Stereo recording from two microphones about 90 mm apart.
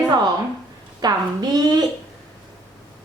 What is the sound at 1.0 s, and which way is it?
Speech, 50° right (ahead or behind).